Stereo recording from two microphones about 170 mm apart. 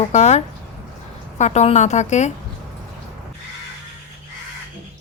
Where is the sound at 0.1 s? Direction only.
40° left (ahead or behind).